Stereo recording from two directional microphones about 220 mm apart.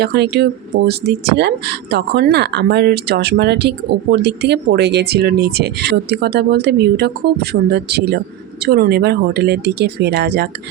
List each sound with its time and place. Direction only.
0.0 s speech: 50° right (ahead or behind)